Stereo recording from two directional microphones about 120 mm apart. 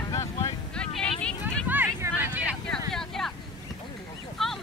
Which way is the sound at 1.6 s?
15° right (ahead or behind).